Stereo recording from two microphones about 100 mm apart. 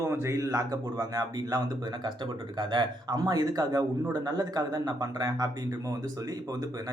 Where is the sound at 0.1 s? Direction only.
30° right (ahead or behind).